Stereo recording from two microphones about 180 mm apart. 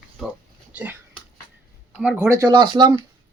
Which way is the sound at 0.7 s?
10° right (ahead or behind).